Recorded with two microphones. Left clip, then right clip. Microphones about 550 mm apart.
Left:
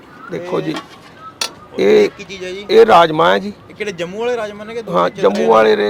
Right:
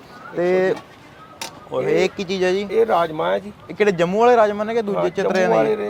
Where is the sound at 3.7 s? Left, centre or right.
Right.